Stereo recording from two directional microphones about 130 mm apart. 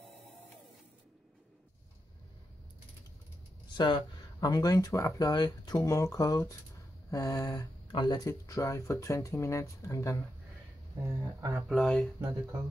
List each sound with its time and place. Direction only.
3.7 s speech: 35° left (ahead or behind)
11.1 s speech: 25° right (ahead or behind)
11.7 s speech: centre (ahead or behind)